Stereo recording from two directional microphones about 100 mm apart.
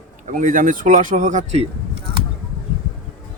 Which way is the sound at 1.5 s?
80° right.